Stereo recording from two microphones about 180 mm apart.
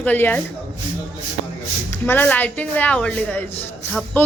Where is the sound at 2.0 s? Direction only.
10° left (ahead or behind).